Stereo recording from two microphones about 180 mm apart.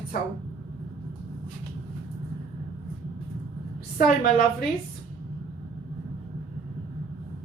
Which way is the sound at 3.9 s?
55° left (ahead or behind).